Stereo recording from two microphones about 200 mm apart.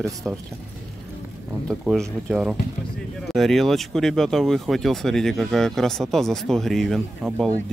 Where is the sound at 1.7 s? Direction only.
Centre (ahead or behind).